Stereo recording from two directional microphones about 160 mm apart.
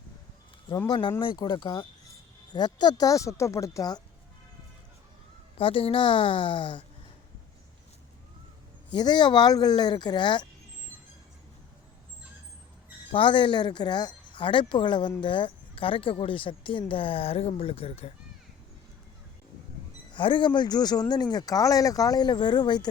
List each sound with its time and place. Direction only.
0.9 s speech: 30° left (ahead or behind)
5.5 s speech: 35° left (ahead or behind)
9.0 s speech: 25° left (ahead or behind)
13.1 s speech: 35° left (ahead or behind)
20.1 s speech: 30° left (ahead or behind)